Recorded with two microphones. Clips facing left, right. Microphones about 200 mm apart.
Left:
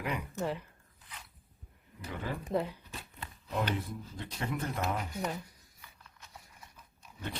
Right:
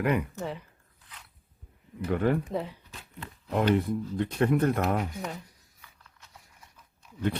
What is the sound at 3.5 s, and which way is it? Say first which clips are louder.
Speech: right 9 dB; 60° right (ahead or behind).